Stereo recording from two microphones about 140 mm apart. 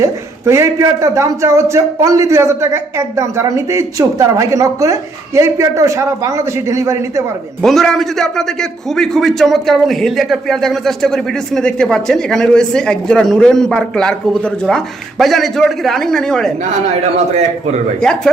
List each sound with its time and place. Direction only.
0.0 s a man's voice: 20° right (ahead or behind)
7.6 s a man's voice: centre (ahead or behind)
17.2 s a man's voice: 55° right (ahead or behind)
18.0 s a man's voice: 5° left (ahead or behind)